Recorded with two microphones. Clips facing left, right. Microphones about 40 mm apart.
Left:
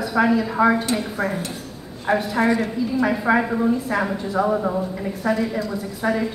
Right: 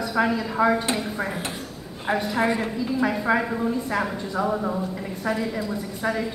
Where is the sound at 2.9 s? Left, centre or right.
Centre.